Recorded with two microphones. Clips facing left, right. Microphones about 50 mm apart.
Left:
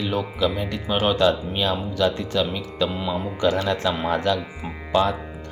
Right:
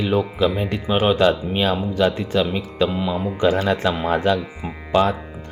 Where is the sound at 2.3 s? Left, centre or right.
Right.